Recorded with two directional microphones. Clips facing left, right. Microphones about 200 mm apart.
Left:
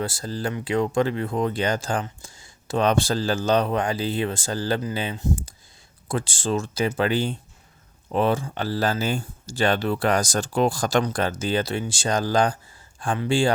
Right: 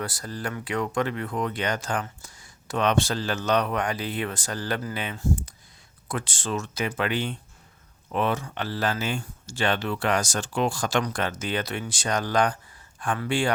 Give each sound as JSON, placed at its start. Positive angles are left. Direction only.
{"t": 0.0, "sound": "speech", "side_deg": 25}